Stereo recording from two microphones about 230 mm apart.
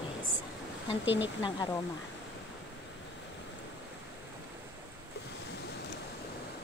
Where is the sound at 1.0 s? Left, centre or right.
Left.